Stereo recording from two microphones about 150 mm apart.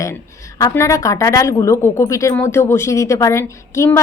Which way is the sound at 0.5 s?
20° left (ahead or behind).